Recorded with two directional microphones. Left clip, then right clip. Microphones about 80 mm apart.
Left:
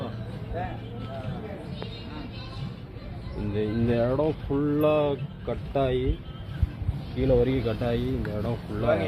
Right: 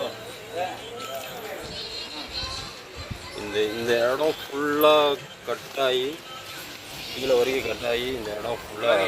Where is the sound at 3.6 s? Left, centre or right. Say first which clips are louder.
Right 4 dB; centre.